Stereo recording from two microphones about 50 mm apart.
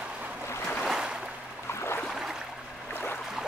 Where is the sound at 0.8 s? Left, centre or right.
Centre.